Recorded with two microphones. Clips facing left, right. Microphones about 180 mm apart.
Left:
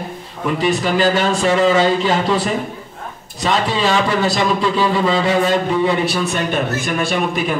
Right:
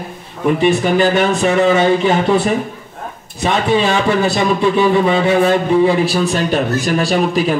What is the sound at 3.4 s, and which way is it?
A man's voice, 25° right (ahead or behind).